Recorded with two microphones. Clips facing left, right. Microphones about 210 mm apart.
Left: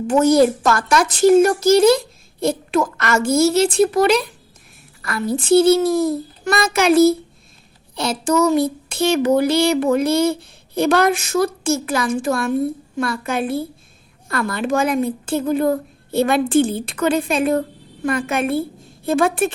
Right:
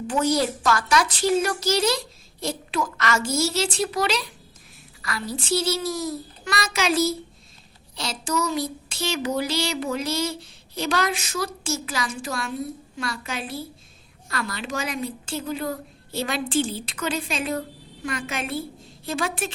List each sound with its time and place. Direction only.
0.1 s a woman's voice: 50° left (ahead or behind)